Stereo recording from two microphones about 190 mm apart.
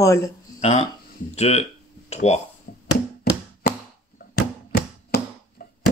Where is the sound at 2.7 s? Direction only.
50° left (ahead or behind).